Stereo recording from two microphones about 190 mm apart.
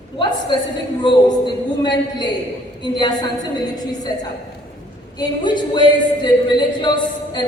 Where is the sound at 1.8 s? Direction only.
25° left (ahead or behind).